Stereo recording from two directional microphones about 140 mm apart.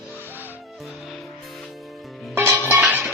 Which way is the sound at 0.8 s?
Centre (ahead or behind).